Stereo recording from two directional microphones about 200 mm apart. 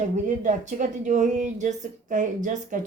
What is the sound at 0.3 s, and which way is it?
Speech, 40° right (ahead or behind).